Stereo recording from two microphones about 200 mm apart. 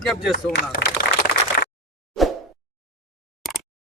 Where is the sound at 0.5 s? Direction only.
55° left (ahead or behind).